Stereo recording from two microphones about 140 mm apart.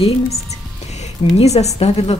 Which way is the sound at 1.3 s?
50° left (ahead or behind).